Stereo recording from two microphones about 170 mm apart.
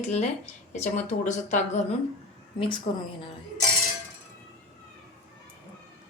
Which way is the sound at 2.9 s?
35° left (ahead or behind).